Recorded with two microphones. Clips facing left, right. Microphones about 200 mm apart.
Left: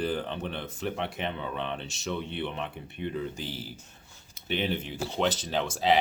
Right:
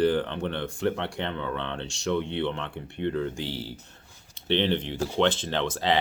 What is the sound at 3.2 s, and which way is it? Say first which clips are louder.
Speech: right 4 dB; 90° right.